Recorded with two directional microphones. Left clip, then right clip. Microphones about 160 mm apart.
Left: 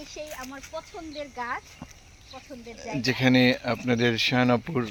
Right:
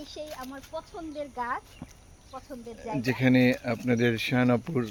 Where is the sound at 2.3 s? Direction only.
Centre (ahead or behind).